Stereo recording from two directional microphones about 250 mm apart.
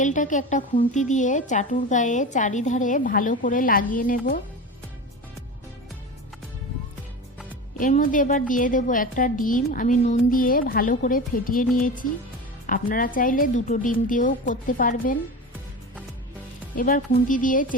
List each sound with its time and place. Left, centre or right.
0.0 s a woman's voice: left
7.8 s a woman's voice: left
16.7 s a woman's voice: left